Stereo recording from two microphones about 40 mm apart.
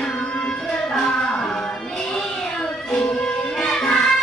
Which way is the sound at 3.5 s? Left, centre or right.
Centre.